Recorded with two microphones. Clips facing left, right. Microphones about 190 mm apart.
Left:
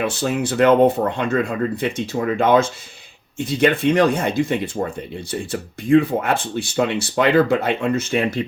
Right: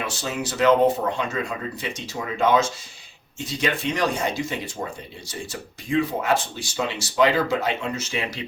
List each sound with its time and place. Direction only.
0.0 s speech: 55° left (ahead or behind)